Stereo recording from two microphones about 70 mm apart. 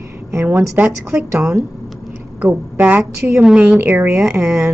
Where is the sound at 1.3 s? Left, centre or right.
Right.